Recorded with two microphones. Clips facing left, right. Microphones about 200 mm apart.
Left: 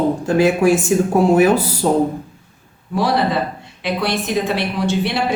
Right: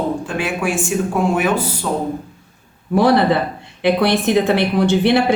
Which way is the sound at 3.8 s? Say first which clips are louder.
Right 5 dB; 60° right (ahead or behind).